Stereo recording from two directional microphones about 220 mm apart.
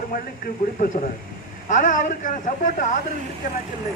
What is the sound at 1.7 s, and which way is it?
Speech, 35° left (ahead or behind).